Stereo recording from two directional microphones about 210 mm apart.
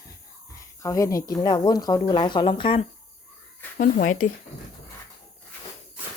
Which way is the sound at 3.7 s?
40° left (ahead or behind).